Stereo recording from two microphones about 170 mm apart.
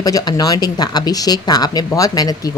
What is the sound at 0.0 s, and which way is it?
Speech, 20° left (ahead or behind).